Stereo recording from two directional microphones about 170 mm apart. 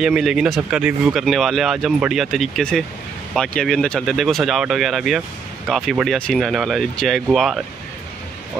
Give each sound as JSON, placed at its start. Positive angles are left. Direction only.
{"t": 0.0, "sound": "speech", "side_deg": -5}